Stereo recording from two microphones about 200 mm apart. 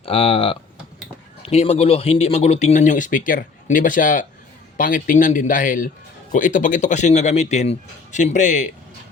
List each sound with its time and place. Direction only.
0.0 s speech: 30° left (ahead or behind)